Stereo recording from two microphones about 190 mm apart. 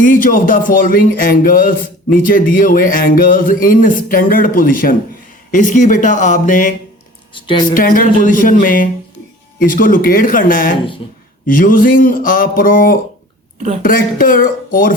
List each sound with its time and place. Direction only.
0.0 s speech: 45° left (ahead or behind)
7.3 s speech: 25° left (ahead or behind)
7.7 s speech: 45° left (ahead or behind)
11.0 s speech: 30° left (ahead or behind)
11.4 s speech: 45° left (ahead or behind)